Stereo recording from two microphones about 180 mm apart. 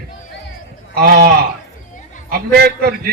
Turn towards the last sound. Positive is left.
turn(degrees=-60)  # may be behind; listen again after turning